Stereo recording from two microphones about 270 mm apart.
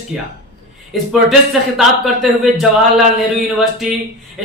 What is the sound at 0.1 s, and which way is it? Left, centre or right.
Speech, centre.